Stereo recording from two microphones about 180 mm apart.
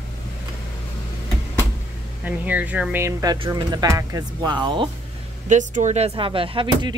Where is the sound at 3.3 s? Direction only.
25° right (ahead or behind).